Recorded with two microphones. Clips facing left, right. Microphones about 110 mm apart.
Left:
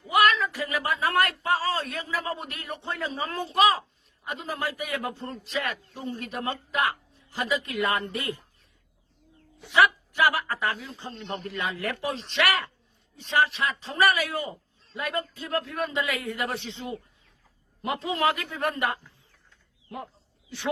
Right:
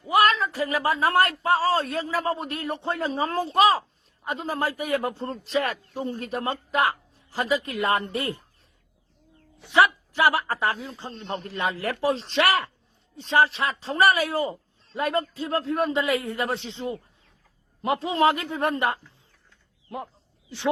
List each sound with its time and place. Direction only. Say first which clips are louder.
0.1 s speech: right 2 dB; 30° right (ahead or behind)
9.6 s a man's voice: right 2 dB; 30° right (ahead or behind)